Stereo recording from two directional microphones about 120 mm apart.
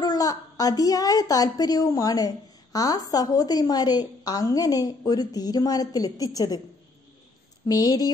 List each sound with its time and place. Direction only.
0.0 s a woman's voice: 30° left (ahead or behind)
7.6 s a woman's voice: 30° left (ahead or behind)